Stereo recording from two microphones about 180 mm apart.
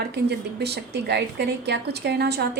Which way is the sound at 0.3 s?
65° right (ahead or behind).